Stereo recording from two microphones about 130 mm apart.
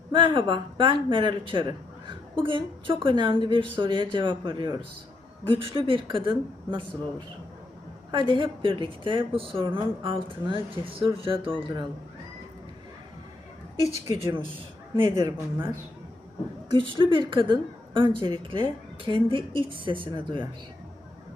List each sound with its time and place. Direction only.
0.1 s a woman's voice: 35° right (ahead or behind)
15.1 s speech: 25° right (ahead or behind)
16.7 s a woman's voice: 40° right (ahead or behind)